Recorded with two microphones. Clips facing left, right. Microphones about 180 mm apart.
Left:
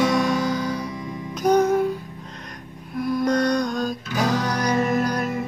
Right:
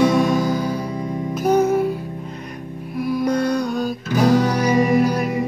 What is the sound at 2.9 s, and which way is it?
Music, 10° right (ahead or behind).